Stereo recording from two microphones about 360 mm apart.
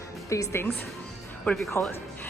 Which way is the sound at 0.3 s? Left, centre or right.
Centre.